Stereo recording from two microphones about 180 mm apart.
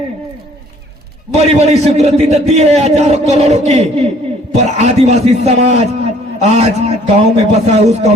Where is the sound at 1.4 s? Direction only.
35° right (ahead or behind).